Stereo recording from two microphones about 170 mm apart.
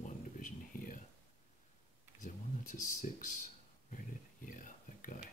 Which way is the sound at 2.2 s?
50° left (ahead or behind).